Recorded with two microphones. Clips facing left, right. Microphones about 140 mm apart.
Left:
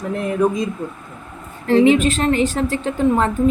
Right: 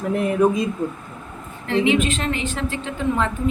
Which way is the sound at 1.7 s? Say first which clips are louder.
Left 6 dB; 40° left (ahead or behind).